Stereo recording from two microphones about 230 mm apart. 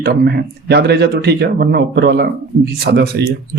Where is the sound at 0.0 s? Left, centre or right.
Right.